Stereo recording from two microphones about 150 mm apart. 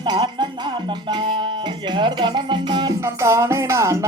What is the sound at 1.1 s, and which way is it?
Music, 30° right (ahead or behind).